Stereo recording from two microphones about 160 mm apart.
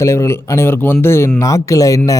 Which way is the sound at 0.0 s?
15° left (ahead or behind).